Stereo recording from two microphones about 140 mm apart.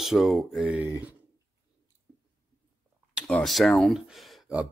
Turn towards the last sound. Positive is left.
turn(degrees=0)  # may be behind; listen again after turning